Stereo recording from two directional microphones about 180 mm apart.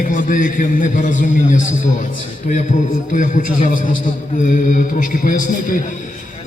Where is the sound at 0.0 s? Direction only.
45° left (ahead or behind).